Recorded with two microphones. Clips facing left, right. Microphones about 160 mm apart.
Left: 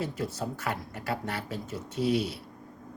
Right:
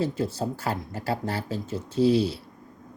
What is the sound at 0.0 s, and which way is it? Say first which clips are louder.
Speech: right 6 dB; 30° right (ahead or behind).